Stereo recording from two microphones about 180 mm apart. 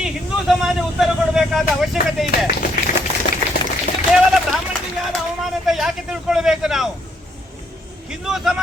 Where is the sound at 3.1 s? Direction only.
35° right (ahead or behind).